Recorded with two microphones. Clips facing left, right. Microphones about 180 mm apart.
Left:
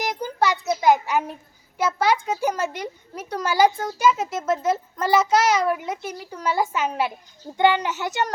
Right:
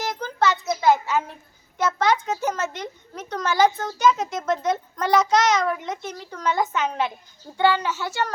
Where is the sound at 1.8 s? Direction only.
10° left (ahead or behind).